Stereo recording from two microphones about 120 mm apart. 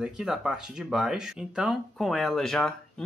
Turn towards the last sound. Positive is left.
turn(degrees=5)  # may be behind; listen again after turning